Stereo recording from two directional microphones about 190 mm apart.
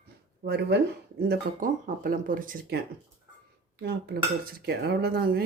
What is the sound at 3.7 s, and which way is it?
Cutlery, 60° right (ahead or behind).